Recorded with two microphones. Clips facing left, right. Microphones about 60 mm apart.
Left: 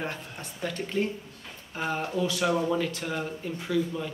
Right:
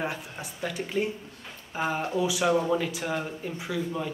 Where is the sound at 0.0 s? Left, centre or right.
Centre.